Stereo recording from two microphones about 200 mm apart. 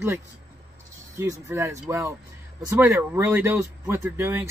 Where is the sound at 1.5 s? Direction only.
15° right (ahead or behind).